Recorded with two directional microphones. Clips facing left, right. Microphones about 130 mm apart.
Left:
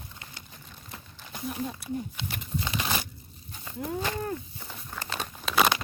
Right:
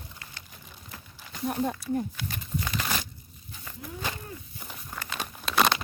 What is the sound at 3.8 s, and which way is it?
Speech, 55° left (ahead or behind).